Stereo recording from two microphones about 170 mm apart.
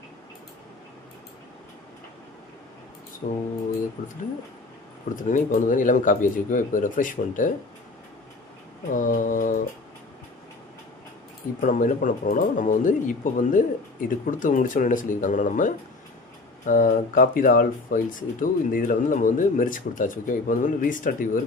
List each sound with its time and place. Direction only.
3.2 s speech: 55° left (ahead or behind)
5.1 s speech: 50° left (ahead or behind)
8.9 s speech: 50° left (ahead or behind)
11.6 s speech: 50° left (ahead or behind)